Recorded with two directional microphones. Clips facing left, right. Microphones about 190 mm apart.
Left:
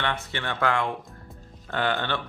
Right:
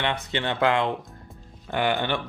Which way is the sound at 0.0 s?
20° right (ahead or behind).